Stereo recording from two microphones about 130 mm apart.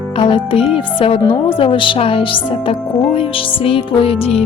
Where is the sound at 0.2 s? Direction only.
40° left (ahead or behind).